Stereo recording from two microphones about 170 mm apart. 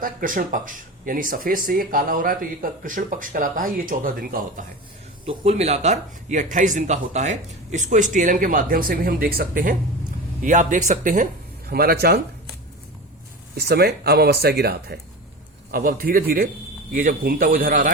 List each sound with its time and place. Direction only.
0.0 s speech: 55° right (ahead or behind)
5.2 s speech: 35° right (ahead or behind); by 9.7 s 60° right (ahead or behind)
10.4 s speech: 50° right (ahead or behind); by 12.2 s 65° right (ahead or behind)
13.6 s speech: 70° right (ahead or behind); by 17.9 s 55° right (ahead or behind)